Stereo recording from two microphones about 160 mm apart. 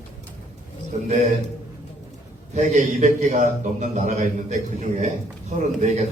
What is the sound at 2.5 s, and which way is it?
A man's voice, 50° right (ahead or behind).